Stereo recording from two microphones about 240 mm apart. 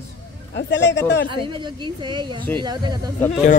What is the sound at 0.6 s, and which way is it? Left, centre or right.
Speech, left.